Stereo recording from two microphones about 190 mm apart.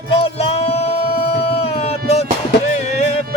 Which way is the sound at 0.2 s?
35° left (ahead or behind).